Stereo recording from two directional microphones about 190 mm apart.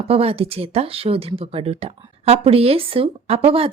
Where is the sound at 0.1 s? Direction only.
30° right (ahead or behind).